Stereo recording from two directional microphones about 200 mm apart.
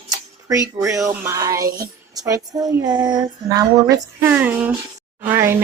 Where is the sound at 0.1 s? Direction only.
15° right (ahead or behind).